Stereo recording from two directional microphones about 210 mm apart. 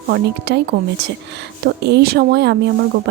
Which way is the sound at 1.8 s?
50° right (ahead or behind).